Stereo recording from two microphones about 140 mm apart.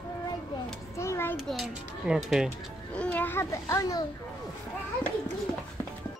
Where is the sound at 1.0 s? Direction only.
20° left (ahead or behind).